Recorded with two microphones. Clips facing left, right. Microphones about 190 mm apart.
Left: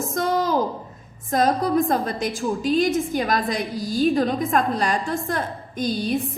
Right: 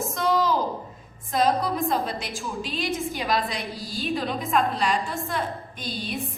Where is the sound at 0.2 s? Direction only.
50° left (ahead or behind).